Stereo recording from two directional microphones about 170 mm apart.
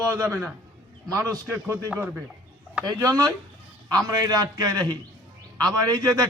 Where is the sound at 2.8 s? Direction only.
20° right (ahead or behind).